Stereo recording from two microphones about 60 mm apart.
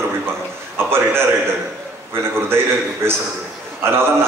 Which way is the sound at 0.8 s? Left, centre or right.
Right.